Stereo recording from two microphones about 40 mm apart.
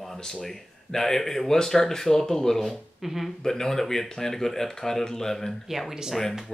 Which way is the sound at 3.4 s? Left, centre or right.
Centre.